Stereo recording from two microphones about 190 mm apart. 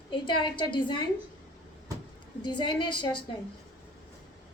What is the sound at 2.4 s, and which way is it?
Speech, 25° left (ahead or behind).